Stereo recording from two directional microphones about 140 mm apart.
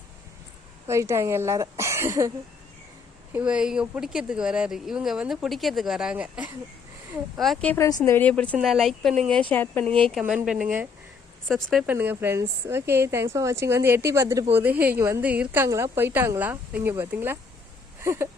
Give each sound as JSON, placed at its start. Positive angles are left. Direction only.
{"t": 0.9, "sound": "a woman's voice", "side_deg": -20}
{"t": 3.3, "sound": "speech", "side_deg": -10}
{"t": 7.7, "sound": "a woman's voice", "side_deg": 25}
{"t": 8.1, "sound": "a woman's voice", "side_deg": 10}
{"t": 9.3, "sound": "a woman's voice", "side_deg": 10}
{"t": 9.8, "sound": "a woman's voice", "side_deg": -40}
{"t": 10.2, "sound": "a woman's voice", "side_deg": -5}
{"t": 11.9, "sound": "a woman's voice", "side_deg": -15}
{"t": 18.0, "sound": "a sound", "side_deg": -20}